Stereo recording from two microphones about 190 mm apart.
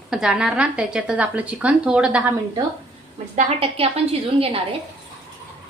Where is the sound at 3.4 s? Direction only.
35° right (ahead or behind).